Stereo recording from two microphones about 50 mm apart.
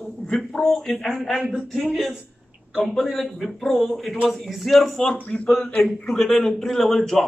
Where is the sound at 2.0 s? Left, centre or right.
Centre.